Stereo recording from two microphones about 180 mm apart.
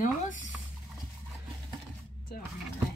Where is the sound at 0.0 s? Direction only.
45° left (ahead or behind).